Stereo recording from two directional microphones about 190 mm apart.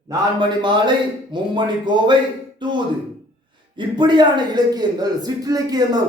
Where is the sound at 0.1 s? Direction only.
25° right (ahead or behind).